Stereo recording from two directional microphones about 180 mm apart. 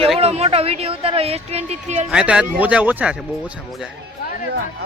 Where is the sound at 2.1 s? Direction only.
5° right (ahead or behind).